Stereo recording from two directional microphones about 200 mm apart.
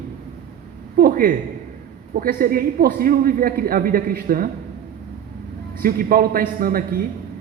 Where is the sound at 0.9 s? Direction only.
45° right (ahead or behind).